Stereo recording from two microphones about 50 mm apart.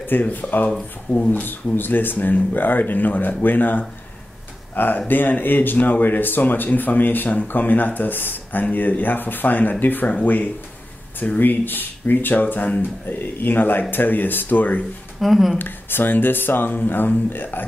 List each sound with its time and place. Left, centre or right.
0.0 s speech: left
15.1 s speech: centre
15.5 s speech: left